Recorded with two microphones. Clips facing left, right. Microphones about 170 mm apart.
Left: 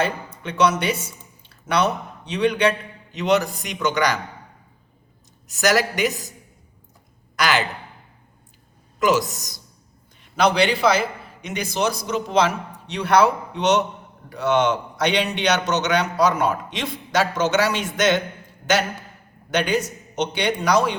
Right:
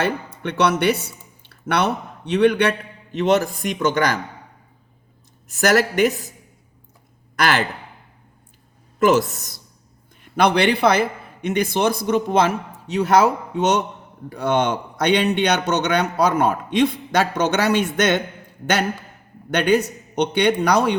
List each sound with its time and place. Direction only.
0.0 s speech: 65° right (ahead or behind); by 4.2 s 50° right (ahead or behind)
5.5 s a man's voice: 55° right (ahead or behind)
7.3 s a man's voice: 50° right (ahead or behind)
9.0 s a man's voice: 55° right (ahead or behind)